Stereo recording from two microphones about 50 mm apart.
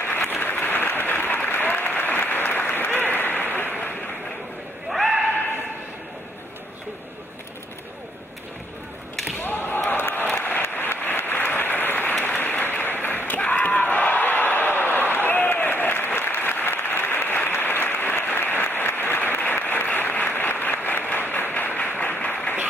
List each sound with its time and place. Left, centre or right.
0.3 s applause: left
4.8 s a sound: centre
9.4 s slam: left
10.3 s applause: left